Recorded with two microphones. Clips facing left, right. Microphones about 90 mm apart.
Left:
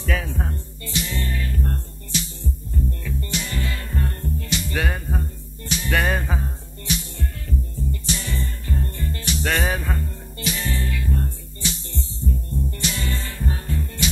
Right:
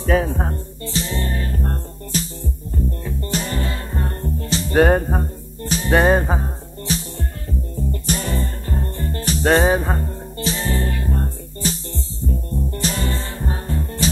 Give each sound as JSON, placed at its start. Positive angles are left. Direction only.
{"t": 0.0, "sound": "music", "side_deg": -35}
{"t": 7.9, "sound": "music", "side_deg": -45}